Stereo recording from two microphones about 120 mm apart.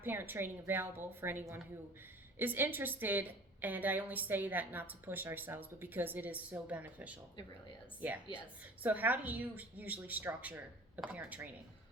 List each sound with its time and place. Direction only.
0.0 s a woman's voice: 15° right (ahead or behind)